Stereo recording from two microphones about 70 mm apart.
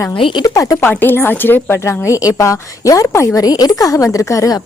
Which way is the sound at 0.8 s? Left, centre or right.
Left.